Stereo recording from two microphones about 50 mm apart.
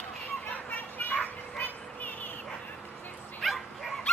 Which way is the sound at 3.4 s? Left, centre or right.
Centre.